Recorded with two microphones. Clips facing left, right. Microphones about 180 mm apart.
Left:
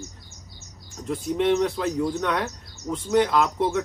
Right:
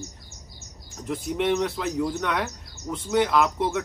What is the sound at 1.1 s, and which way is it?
Speech, 5° right (ahead or behind).